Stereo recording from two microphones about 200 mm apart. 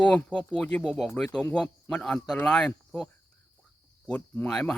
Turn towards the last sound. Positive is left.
turn(degrees=5)  # may be behind; listen again after turning